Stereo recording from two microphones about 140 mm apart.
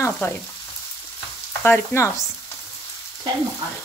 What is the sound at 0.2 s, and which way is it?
Speech, 20° left (ahead or behind).